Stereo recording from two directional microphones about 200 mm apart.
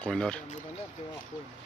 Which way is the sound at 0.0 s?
5° left (ahead or behind).